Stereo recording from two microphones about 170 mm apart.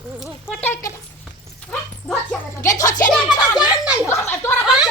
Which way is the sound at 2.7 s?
20° left (ahead or behind).